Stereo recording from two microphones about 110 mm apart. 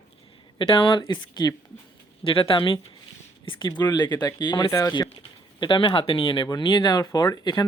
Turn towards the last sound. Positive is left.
turn(degrees=40)  # may be behind; listen again after turning